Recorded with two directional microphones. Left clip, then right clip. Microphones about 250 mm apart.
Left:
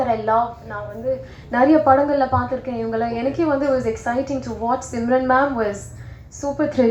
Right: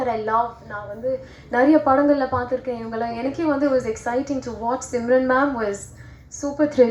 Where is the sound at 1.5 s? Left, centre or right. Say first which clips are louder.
Left 2 dB; right.